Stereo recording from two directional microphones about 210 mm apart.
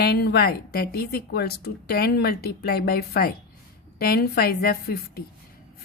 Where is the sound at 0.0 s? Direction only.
50° left (ahead or behind).